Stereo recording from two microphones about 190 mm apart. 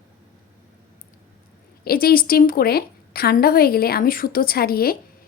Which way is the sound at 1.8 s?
55° left (ahead or behind).